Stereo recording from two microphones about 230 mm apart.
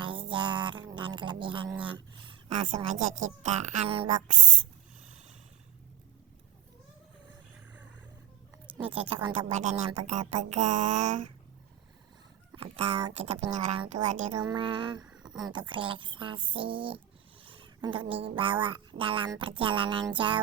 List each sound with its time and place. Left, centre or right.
0.0 s a sound: right
2.6 s speech: right
9.0 s speech: right
9.5 s speech: right
12.5 s speech: right
15.0 s a sound: centre
15.4 s speech: centre
17.4 s a sound: right
18.3 s speech: right